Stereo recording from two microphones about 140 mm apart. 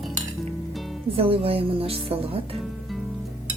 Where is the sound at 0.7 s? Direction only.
Centre (ahead or behind).